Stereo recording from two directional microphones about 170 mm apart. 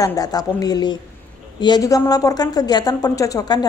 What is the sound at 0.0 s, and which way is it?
A woman's voice, 20° left (ahead or behind).